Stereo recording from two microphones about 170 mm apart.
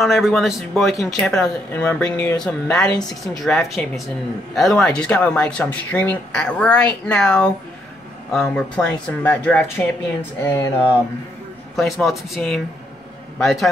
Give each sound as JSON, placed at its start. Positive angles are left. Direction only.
{"t": 0.0, "sound": "speech", "side_deg": 0}
{"t": 11.7, "sound": "speech", "side_deg": 0}